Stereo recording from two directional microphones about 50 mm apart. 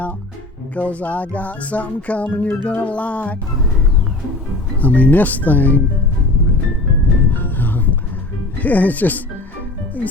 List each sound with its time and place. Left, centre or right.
0.8 s music: left
4.8 s speech: left
7.3 s music: left
8.5 s speech: left